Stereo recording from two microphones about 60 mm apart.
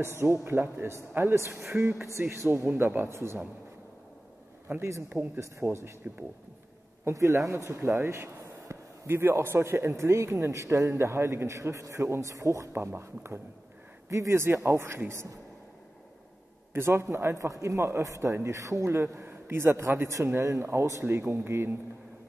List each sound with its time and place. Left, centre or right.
0.0 s speech: right
4.7 s speech: right
5.1 s speech: right
5.4 s speech: right
7.1 s speech: right
16.7 s speech: right
18.9 s speech: right